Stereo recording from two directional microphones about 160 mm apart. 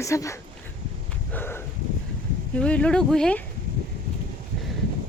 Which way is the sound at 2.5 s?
10° left (ahead or behind).